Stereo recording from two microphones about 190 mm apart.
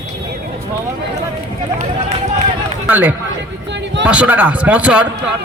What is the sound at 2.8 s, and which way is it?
A man's voice, 5° right (ahead or behind).